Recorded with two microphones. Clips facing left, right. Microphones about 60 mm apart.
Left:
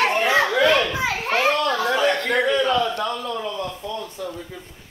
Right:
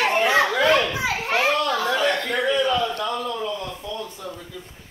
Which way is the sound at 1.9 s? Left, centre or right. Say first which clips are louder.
Left 3 dB; left.